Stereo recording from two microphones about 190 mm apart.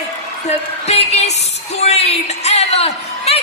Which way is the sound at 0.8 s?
35° left (ahead or behind).